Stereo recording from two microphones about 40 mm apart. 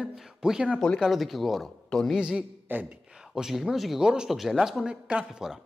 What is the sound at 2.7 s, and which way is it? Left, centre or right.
Speech, right.